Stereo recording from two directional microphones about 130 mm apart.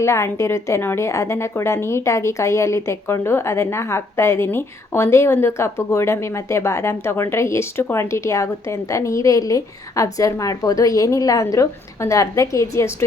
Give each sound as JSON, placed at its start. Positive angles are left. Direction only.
{"t": 0.0, "sound": "a woman's voice", "side_deg": 20}